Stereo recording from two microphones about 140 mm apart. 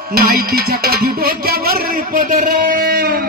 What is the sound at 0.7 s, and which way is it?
Speech, 90° right.